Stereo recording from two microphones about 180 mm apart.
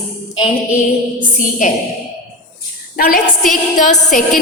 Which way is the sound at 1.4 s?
45° left (ahead or behind).